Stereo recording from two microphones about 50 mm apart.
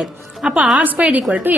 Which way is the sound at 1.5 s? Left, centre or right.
Right.